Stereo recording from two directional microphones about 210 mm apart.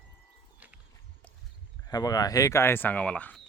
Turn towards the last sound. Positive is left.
turn(degrees=5)  # may be behind; listen again after turning